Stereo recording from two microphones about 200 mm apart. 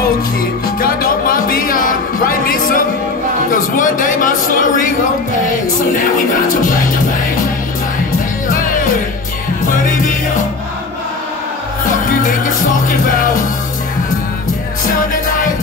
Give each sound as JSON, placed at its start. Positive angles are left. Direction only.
{"t": 0.7, "sound": "music", "side_deg": 45}
{"t": 3.4, "sound": "a sound", "side_deg": 40}
{"t": 6.1, "sound": "music", "side_deg": 40}
{"t": 8.5, "sound": "music", "side_deg": 40}
{"t": 12.1, "sound": "music", "side_deg": 40}